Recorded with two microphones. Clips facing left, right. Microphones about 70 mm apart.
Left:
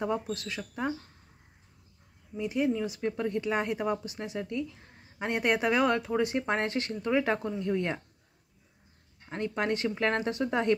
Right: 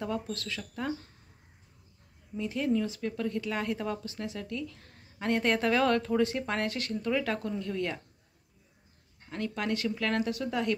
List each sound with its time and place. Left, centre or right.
0.0 s speech: left
2.3 s speech: centre
9.3 s speech: left